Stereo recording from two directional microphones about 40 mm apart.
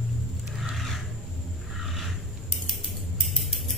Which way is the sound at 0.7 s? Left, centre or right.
Centre.